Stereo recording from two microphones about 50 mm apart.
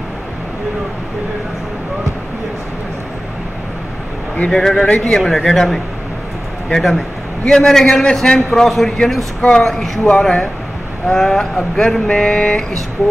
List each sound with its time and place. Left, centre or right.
4.5 s a man's voice: centre
12.1 s a man's voice: centre